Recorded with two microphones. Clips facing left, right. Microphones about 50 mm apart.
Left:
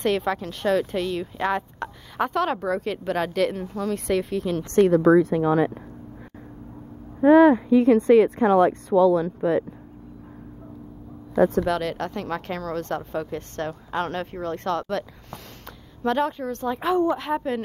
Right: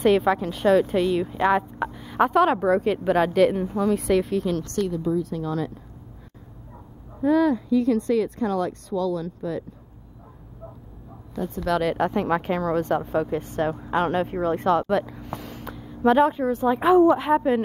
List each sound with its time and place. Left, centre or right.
0.0 s speech: centre
3.9 s speech: centre
4.9 s speech: left
5.3 s speech: left
7.2 s speech: left
11.3 s speech: left
11.7 s speech: centre